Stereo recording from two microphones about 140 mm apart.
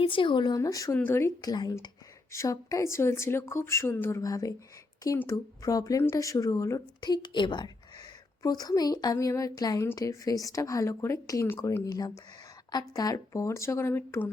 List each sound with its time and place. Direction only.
0.0 s speech: 35° left (ahead or behind); by 14.3 s 15° left (ahead or behind)